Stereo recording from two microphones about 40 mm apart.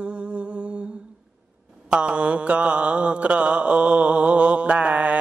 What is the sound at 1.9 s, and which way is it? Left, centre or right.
Mantra, right.